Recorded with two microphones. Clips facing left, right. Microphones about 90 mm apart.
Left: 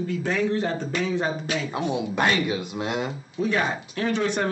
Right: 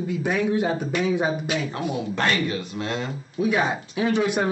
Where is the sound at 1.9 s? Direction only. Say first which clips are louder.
Left 1 dB; 15° left (ahead or behind).